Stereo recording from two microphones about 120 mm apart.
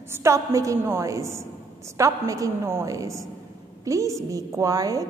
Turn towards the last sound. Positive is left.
turn(degrees=-30)  # may be behind; listen again after turning